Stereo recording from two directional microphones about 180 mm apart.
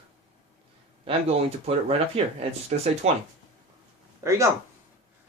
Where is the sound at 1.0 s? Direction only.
30° right (ahead or behind).